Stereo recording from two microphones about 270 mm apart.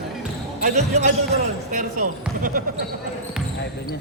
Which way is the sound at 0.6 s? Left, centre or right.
Right.